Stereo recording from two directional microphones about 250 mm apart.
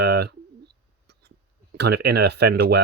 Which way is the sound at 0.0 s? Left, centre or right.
Right.